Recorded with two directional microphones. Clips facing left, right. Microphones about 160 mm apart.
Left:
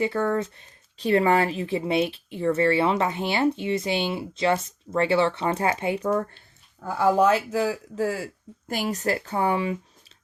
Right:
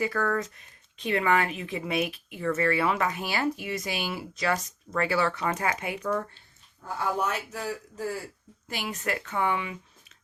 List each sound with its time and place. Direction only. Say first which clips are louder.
0.0 s speech: left 4 dB; 25° left (ahead or behind)
6.8 s speech: left 9 dB; 90° left
8.6 s speech: left 6 dB; 45° left (ahead or behind)